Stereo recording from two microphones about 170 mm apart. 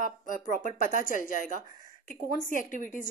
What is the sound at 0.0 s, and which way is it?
A woman's voice, 50° left (ahead or behind).